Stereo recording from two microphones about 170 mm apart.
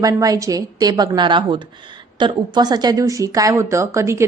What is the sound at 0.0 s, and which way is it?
A woman's voice, 20° right (ahead or behind).